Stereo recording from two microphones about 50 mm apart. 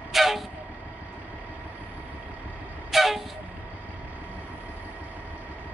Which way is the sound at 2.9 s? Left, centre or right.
Centre.